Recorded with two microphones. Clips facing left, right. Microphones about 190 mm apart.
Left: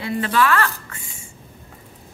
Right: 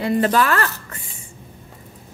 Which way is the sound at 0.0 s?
40° right (ahead or behind).